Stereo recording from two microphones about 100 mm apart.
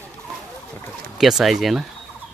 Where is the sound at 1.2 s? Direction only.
Centre (ahead or behind).